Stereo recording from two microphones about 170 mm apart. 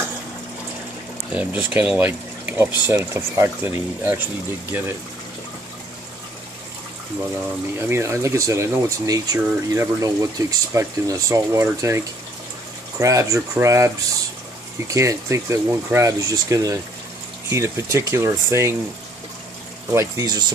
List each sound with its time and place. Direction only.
1.3 s speech: 10° right (ahead or behind)
7.8 s speech: 15° right (ahead or behind)
13.0 s speech: 20° right (ahead or behind)
19.9 s speech: 15° right (ahead or behind)